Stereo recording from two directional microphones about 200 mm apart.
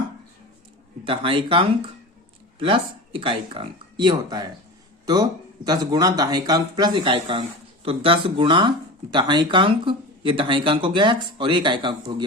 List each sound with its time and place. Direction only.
1.0 s speech: 25° right (ahead or behind)